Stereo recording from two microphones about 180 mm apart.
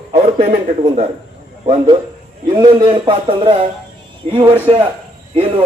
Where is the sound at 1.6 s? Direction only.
30° right (ahead or behind).